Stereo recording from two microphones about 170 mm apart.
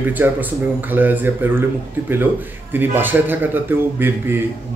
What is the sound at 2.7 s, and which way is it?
A man's voice, 10° right (ahead or behind).